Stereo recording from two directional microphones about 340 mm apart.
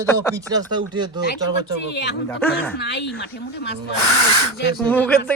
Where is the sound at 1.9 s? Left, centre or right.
Left.